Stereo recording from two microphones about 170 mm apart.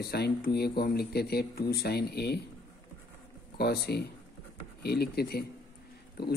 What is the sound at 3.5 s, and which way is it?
A woman's voice, 70° left (ahead or behind).